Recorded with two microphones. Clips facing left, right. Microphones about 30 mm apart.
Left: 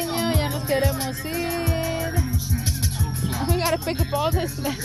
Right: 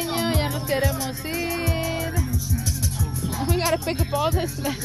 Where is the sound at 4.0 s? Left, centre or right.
Centre.